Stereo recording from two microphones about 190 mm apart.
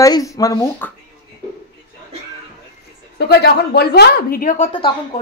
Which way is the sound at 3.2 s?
55° left (ahead or behind).